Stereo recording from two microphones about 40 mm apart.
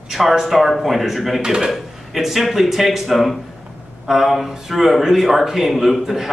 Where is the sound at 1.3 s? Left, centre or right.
Centre.